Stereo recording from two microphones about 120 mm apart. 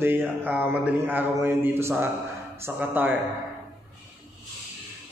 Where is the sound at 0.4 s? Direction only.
15° right (ahead or behind).